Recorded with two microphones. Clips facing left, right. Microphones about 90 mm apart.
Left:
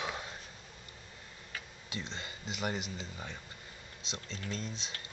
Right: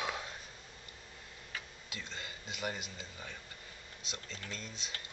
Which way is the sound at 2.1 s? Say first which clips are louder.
Left 3 dB; 30° left (ahead or behind).